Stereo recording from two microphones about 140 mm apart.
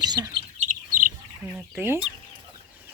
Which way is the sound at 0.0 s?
30° right (ahead or behind).